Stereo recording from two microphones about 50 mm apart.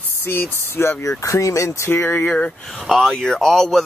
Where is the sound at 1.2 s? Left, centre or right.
Left.